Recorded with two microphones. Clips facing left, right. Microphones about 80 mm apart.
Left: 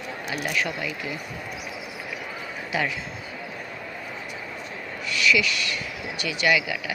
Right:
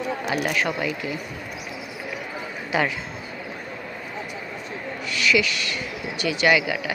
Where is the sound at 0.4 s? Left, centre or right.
Right.